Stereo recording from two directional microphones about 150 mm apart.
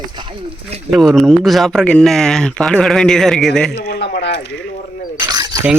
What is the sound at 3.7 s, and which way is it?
Speech, 85° left.